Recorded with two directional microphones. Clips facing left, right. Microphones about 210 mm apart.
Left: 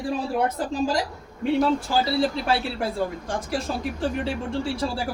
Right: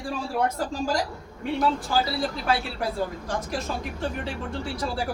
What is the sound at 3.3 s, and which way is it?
Speech, 30° left (ahead or behind).